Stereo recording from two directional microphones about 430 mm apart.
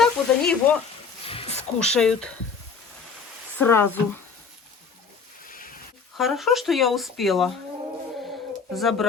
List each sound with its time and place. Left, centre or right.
0.0 s frying: centre
1.2 s a sound: centre
2.0 s speech: centre
3.6 s speech: centre
5.5 s a sound: centre
6.1 s speech: centre
8.7 s speech: centre